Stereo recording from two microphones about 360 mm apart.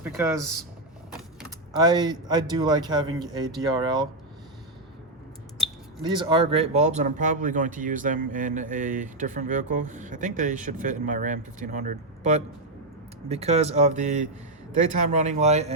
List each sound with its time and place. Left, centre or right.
0.0 s speech: centre
1.7 s speech: centre
6.1 s speech: centre